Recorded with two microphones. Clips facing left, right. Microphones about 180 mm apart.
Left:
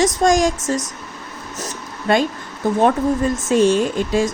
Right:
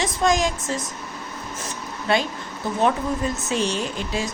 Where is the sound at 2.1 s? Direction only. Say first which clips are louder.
Left 5 dB; 50° left (ahead or behind).